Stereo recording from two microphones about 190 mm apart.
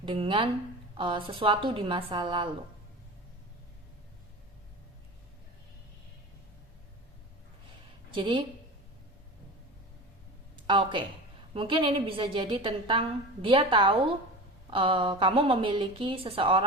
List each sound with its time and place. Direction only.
0.0 s a woman's voice: 25° right (ahead or behind)
8.1 s a woman's voice: 25° right (ahead or behind)
10.7 s a woman's voice: 25° right (ahead or behind)